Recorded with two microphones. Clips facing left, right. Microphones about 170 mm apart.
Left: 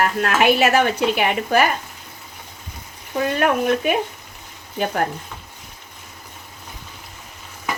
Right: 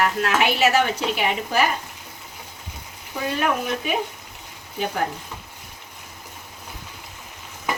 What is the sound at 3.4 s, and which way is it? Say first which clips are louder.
Speech: left 5 dB; 60° left (ahead or behind).